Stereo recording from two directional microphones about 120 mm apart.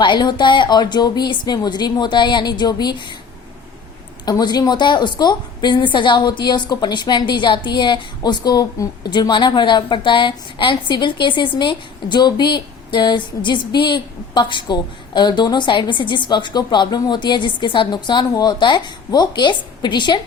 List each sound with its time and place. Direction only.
0.0 s a woman's voice: 40° left (ahead or behind)
4.3 s a woman's voice: 35° left (ahead or behind)